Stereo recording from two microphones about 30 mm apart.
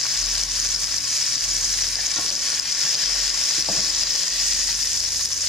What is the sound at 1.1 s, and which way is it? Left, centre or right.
Frying, centre.